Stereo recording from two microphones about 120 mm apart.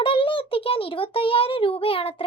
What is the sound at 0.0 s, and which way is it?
A child's voice, 45° left (ahead or behind).